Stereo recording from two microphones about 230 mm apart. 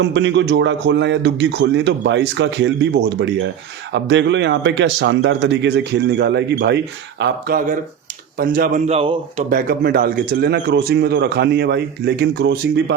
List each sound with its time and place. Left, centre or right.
0.0 s a man's voice: right
9.5 s speech: right